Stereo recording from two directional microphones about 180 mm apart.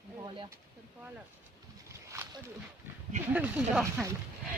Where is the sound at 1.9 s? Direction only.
15° right (ahead or behind).